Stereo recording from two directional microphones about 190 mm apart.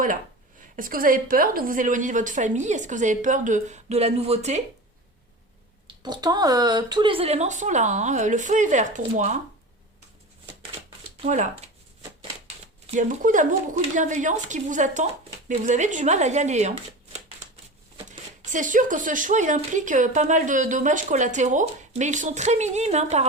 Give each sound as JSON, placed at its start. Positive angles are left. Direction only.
{"t": 0.8, "sound": "speech", "side_deg": -50}
{"t": 6.0, "sound": "speech", "side_deg": -20}
{"t": 11.2, "sound": "speech", "side_deg": -40}
{"t": 13.0, "sound": "speech", "side_deg": -40}
{"t": 18.4, "sound": "speech", "side_deg": -40}